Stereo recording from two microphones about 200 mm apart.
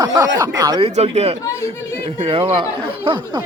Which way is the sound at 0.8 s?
30° right (ahead or behind).